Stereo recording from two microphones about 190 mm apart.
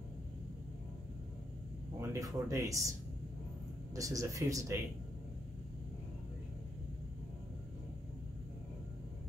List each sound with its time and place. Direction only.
2.0 s speech: 15° right (ahead or behind)
3.9 s speech: 15° right (ahead or behind)